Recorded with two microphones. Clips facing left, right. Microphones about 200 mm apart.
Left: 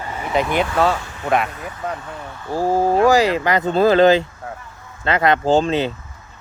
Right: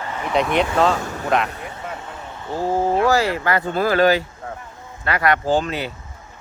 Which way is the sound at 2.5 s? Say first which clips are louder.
Left 3 dB; 10° left (ahead or behind).